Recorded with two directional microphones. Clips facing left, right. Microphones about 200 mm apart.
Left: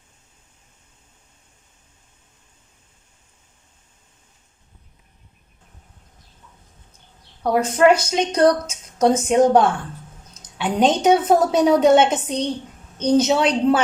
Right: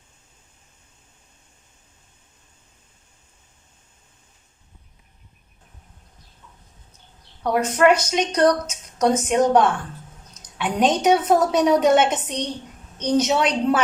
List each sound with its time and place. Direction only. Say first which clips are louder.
7.4 s a woman's voice: left 2 dB; 30° left (ahead or behind)